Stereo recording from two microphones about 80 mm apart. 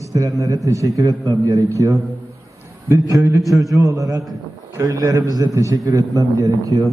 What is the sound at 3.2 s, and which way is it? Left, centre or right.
Speech, right.